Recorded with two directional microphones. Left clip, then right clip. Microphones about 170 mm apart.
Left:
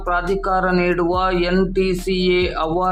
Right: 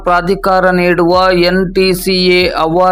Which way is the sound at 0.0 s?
35° right (ahead or behind).